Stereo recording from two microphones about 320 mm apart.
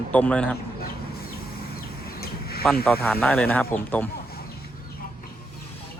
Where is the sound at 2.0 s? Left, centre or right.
Left.